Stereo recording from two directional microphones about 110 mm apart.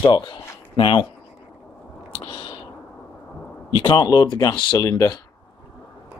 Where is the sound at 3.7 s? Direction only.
45° left (ahead or behind).